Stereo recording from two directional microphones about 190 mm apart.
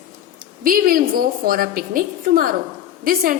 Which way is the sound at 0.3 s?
45° right (ahead or behind).